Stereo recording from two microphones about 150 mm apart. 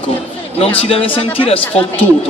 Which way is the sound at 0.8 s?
40° left (ahead or behind).